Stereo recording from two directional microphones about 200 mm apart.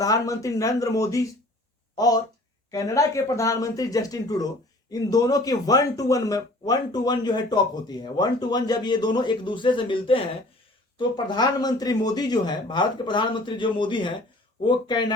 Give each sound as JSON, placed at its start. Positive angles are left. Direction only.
{"t": 0.0, "sound": "speech", "side_deg": 15}